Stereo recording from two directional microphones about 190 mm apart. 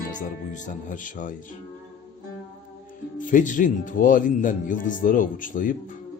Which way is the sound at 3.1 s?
45° left (ahead or behind).